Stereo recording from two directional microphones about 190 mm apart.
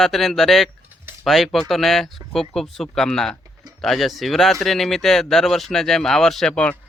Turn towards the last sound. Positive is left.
turn(degrees=5)  # may be behind; listen again after turning